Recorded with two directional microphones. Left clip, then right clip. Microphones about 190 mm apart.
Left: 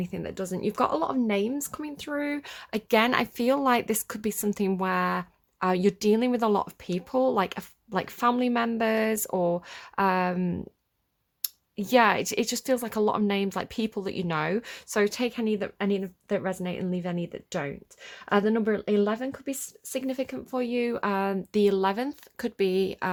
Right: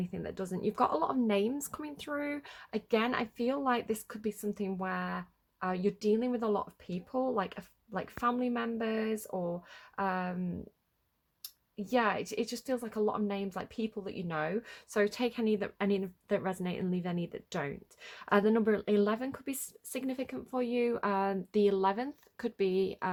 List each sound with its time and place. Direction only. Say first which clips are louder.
0.0 s speech: left 6 dB; 25° left (ahead or behind)